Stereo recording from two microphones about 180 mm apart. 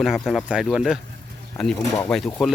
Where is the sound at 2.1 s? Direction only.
5° left (ahead or behind).